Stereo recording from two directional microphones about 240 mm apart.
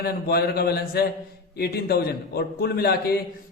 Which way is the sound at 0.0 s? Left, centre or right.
Left.